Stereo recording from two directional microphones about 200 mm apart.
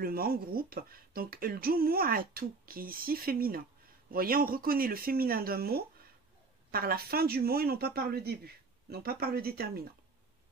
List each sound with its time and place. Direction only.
0.0 s speech: 50° right (ahead or behind)